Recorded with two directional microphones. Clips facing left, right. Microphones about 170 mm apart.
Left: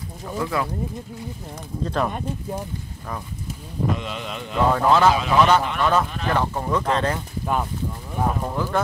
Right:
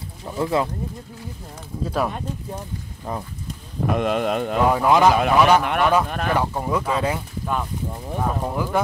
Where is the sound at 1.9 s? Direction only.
5° right (ahead or behind).